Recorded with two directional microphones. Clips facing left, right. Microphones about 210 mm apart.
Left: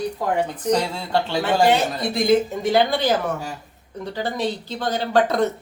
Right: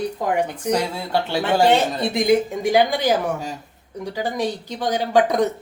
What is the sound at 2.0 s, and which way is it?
Speech, 15° right (ahead or behind).